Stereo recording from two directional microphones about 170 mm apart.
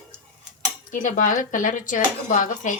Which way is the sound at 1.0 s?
50° left (ahead or behind).